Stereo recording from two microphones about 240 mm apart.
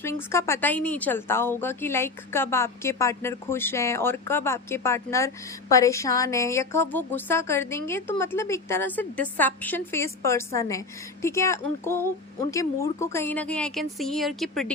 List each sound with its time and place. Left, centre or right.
0.0 s speech: centre